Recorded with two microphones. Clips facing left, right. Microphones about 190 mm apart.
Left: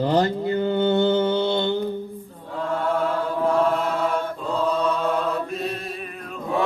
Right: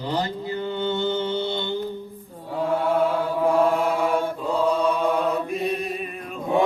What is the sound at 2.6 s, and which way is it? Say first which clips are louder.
Chant: right 2 dB; 10° right (ahead or behind).